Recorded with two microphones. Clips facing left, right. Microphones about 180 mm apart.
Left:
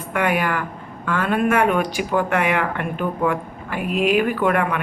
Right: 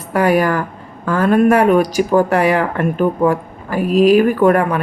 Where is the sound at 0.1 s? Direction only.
35° right (ahead or behind).